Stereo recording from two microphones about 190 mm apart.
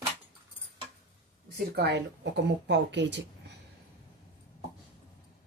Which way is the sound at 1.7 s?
60° right (ahead or behind).